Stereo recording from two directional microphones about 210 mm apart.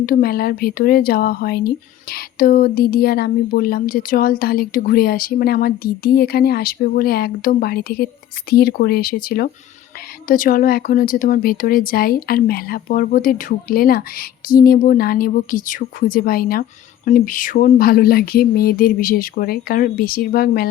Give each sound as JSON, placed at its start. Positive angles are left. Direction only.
{"t": 0.0, "sound": "speech", "side_deg": 45}